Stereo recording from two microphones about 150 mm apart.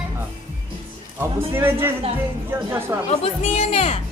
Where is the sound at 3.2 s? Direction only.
45° left (ahead or behind).